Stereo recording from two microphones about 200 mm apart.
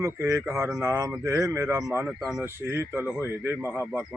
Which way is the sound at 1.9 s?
5° right (ahead or behind).